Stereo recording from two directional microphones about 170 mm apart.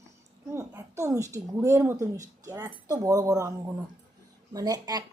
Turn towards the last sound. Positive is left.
turn(degrees=-20)  # may be behind; listen again after turning